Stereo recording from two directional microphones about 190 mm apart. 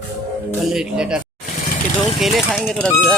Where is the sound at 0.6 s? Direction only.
5° right (ahead or behind).